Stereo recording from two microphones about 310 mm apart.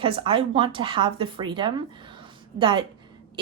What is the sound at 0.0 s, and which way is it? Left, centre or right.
Speech, centre.